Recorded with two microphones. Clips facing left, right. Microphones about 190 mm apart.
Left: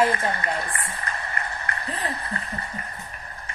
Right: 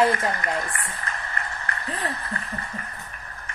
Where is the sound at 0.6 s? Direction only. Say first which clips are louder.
Even; 35° left (ahead or behind).